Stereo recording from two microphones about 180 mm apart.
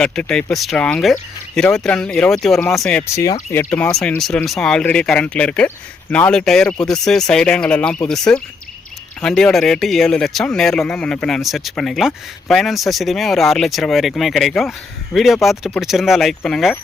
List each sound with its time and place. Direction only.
0.0 s speech: 5° left (ahead or behind)